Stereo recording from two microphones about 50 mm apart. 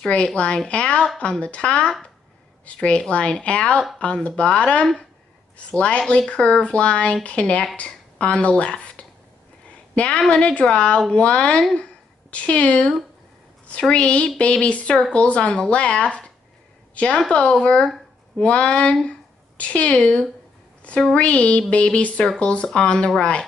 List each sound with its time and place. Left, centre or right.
0.1 s a woman's voice: left